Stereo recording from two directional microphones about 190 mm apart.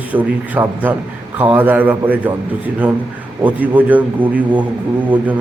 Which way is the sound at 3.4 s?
10° right (ahead or behind).